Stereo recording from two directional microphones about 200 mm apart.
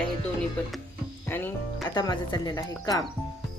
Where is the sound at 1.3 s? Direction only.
10° left (ahead or behind).